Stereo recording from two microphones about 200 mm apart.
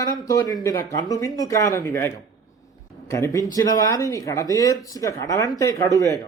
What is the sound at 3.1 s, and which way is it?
Speech, 15° left (ahead or behind).